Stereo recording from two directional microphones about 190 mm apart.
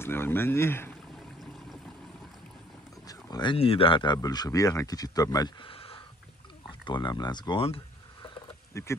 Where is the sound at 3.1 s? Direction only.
20° left (ahead or behind).